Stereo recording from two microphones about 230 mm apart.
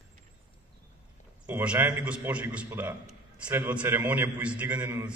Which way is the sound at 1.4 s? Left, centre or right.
Centre.